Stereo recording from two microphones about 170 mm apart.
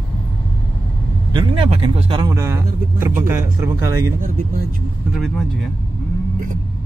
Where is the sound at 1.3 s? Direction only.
30° right (ahead or behind).